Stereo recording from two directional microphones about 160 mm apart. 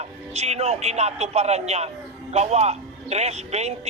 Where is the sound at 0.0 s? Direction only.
40° right (ahead or behind).